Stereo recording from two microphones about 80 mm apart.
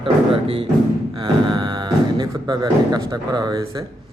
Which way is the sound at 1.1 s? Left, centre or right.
Right.